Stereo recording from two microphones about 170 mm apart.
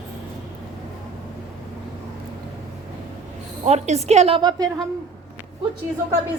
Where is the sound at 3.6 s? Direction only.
40° right (ahead or behind).